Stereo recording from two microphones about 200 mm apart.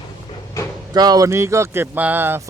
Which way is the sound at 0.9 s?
20° right (ahead or behind).